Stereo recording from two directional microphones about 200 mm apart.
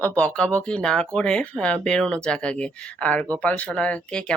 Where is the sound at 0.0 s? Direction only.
5° left (ahead or behind).